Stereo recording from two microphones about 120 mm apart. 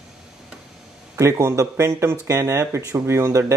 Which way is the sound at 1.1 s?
25° right (ahead or behind).